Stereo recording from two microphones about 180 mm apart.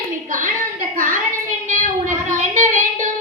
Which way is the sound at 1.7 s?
45° right (ahead or behind).